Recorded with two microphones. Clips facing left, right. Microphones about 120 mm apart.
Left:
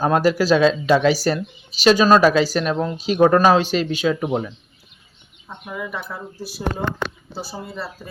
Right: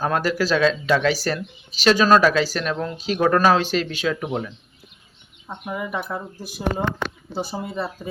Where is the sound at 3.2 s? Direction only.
20° left (ahead or behind).